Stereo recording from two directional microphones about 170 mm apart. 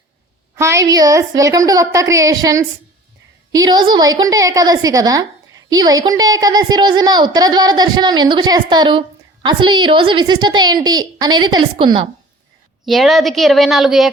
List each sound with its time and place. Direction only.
0.5 s a woman's voice: 15° right (ahead or behind)
12.8 s a woman's voice: centre (ahead or behind)